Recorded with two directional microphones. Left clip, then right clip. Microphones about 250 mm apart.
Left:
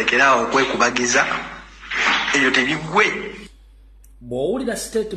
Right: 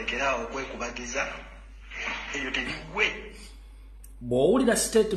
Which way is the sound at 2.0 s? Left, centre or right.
Left.